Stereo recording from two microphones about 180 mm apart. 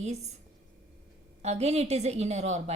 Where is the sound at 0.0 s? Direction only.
40° right (ahead or behind).